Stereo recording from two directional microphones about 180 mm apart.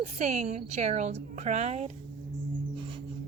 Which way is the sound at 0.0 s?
40° right (ahead or behind).